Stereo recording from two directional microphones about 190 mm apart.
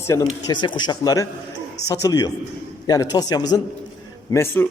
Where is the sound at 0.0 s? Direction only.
15° left (ahead or behind).